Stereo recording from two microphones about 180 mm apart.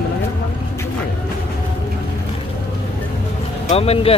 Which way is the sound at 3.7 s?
35° left (ahead or behind).